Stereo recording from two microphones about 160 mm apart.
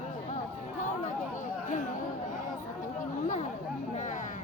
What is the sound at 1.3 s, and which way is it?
Chatter, 50° left (ahead or behind).